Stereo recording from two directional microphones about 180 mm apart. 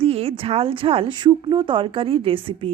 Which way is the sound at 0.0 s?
30° right (ahead or behind).